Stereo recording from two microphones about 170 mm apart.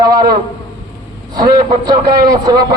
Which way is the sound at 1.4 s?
25° right (ahead or behind).